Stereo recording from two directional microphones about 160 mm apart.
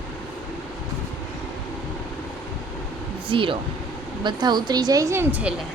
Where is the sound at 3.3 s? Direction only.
35° right (ahead or behind); by 5.5 s 10° right (ahead or behind).